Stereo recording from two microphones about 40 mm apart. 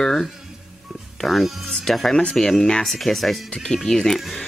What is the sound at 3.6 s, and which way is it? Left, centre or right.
Speech, centre.